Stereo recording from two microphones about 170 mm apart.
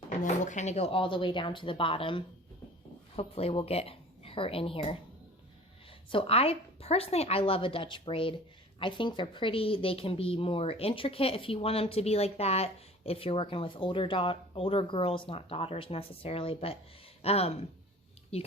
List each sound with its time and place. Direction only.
0.2 s a woman's voice: 45° left (ahead or behind)
6.1 s a woman's voice: 35° left (ahead or behind)